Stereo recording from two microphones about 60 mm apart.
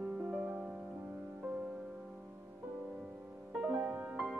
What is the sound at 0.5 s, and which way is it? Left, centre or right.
Music, right.